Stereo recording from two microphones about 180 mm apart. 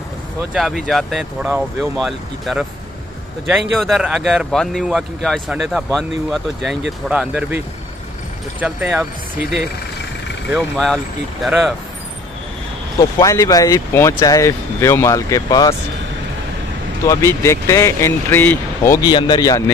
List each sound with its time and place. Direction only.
0.5 s speech: centre (ahead or behind)
3.7 s speech: centre (ahead or behind)
10.5 s speech: centre (ahead or behind)
13.0 s speech: 20° left (ahead or behind)
17.0 s speech: 15° left (ahead or behind)
19.0 s speech: 25° left (ahead or behind)